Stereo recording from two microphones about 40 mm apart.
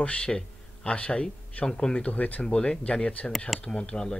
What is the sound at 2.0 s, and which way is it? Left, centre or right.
Speech, left.